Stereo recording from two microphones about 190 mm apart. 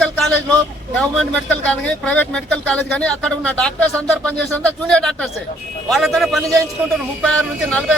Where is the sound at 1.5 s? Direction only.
5° left (ahead or behind).